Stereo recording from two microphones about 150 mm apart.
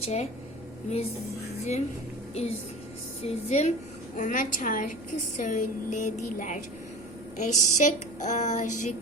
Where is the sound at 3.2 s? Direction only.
45° left (ahead or behind).